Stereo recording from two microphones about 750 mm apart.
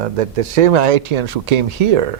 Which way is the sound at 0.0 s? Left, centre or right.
Right.